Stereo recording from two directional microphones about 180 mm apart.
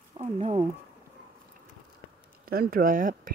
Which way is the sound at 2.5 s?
55° right (ahead or behind).